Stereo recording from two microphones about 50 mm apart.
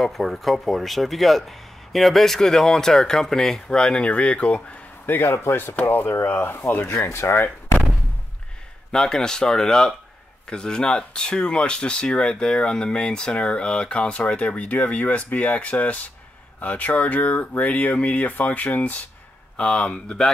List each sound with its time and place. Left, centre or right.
0.0 s speech: centre; by 4.8 s left
5.2 s speech: left
6.4 s speech: left
6.9 s speech: left
7.3 s door: left
8.9 s speech: centre